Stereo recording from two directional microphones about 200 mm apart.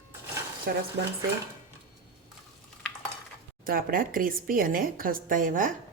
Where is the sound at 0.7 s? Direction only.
55° right (ahead or behind).